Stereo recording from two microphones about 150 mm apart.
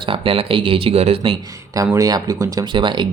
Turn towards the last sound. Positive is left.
turn(degrees=-30)  # may be behind; listen again after turning